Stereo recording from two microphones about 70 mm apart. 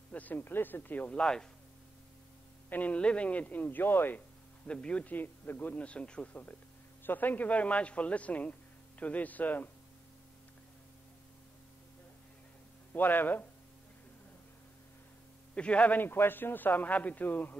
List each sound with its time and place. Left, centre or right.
0.1 s a man's voice: left
1.2 s speech: centre
2.7 s a man's voice: left
4.6 s a man's voice: centre
12.9 s a man's voice: left
15.5 s a man's voice: centre